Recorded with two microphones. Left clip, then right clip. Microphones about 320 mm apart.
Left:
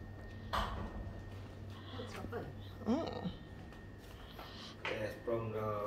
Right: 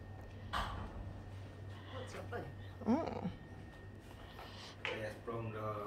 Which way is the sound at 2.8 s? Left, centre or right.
Centre.